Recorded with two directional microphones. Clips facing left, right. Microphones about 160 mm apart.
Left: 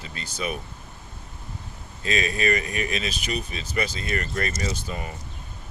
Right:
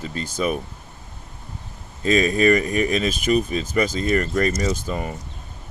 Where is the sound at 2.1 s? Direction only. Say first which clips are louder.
Right 8 dB; 45° right (ahead or behind).